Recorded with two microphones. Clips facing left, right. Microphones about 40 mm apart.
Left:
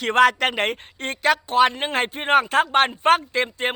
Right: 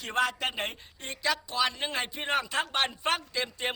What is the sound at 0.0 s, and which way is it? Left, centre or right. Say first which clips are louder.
Speech: left 12 dB; left.